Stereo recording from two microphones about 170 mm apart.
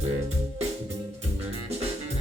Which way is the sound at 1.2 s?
35° right (ahead or behind).